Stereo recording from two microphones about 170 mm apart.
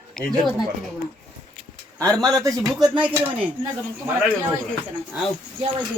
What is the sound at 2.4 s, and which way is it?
Speech, 20° right (ahead or behind).